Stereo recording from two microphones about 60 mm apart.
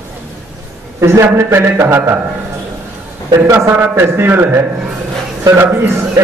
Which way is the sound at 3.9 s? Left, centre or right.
Right.